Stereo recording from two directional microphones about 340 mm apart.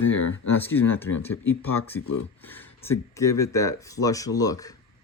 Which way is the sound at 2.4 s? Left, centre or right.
Centre.